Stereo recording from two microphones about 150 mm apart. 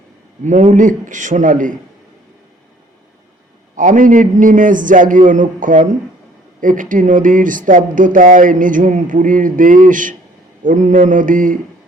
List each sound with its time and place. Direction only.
0.4 s speech: 55° right (ahead or behind)
3.8 s speech: 60° right (ahead or behind)